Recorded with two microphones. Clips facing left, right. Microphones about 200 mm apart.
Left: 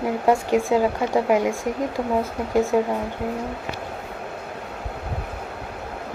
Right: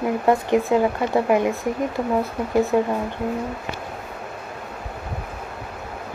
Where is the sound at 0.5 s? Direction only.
10° left (ahead or behind).